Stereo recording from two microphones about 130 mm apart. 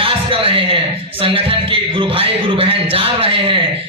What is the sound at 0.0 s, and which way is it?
A man's voice, 45° right (ahead or behind).